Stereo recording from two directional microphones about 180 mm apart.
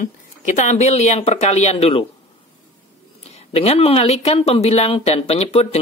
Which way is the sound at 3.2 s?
35° left (ahead or behind).